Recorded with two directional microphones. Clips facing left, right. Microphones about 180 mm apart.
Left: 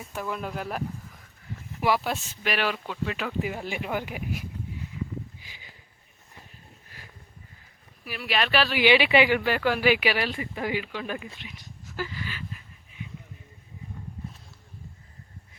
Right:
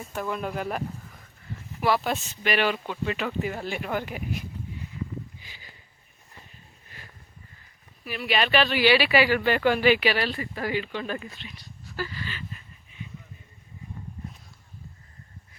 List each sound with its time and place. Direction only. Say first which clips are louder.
0.0 s speech: right 2 dB; centre (ahead or behind)
2.0 s speech: right 2 dB; 5° left (ahead or behind)
8.0 s speech: right 2 dB; 5° left (ahead or behind)
8.8 s speech: left 2 dB; 20° left (ahead or behind)
9.4 s speech: right 2 dB; 5° left (ahead or behind)